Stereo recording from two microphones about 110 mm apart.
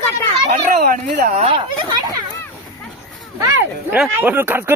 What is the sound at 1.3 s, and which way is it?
Speech, 60° right (ahead or behind).